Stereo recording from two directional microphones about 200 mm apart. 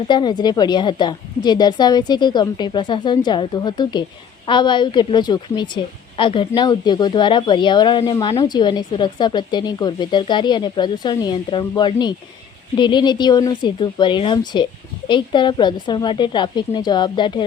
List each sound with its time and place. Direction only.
0.1 s speech: 20° left (ahead or behind)